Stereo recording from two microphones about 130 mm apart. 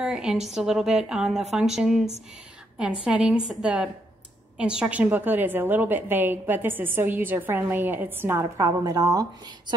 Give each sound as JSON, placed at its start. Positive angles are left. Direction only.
{"t": 0.0, "sound": "a woman's voice", "side_deg": -5}